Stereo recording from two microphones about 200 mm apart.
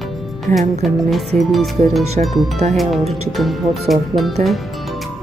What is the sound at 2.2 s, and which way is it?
Speech, 35° right (ahead or behind).